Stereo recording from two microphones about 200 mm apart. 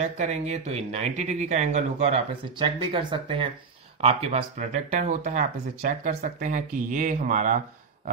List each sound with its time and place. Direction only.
0.0 s speech: 35° right (ahead or behind)